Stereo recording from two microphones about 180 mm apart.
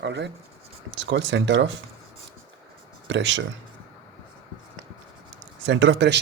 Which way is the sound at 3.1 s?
90° right.